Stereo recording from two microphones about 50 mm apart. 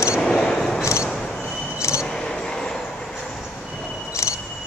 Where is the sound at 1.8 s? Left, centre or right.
Left.